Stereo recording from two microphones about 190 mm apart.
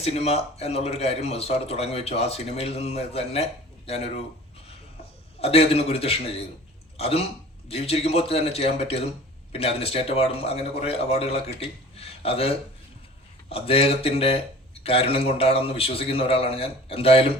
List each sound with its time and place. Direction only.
0.0 s speech: 35° left (ahead or behind)
5.4 s speech: 30° left (ahead or behind)